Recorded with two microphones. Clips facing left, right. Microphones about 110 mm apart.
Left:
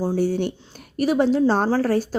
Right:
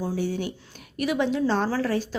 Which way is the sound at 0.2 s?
45° left (ahead or behind).